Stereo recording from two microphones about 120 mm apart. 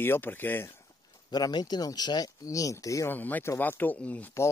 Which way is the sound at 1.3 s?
35° left (ahead or behind).